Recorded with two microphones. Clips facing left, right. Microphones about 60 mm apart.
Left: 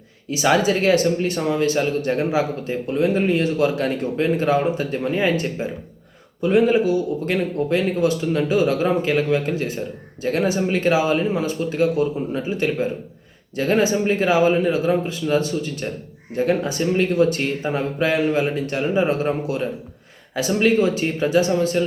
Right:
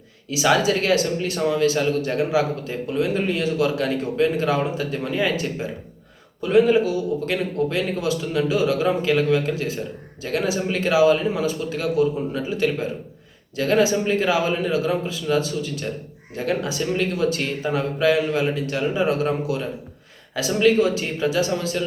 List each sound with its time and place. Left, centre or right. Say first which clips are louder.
0.3 s a man's voice: left 1 dB; left